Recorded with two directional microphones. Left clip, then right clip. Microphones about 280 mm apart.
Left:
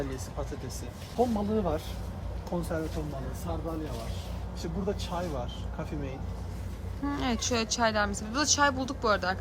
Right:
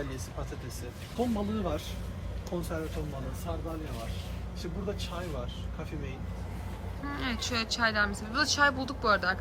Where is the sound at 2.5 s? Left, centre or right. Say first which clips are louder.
Left 3 dB; left.